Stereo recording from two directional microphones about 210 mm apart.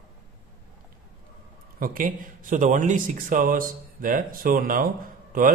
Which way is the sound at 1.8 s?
40° right (ahead or behind).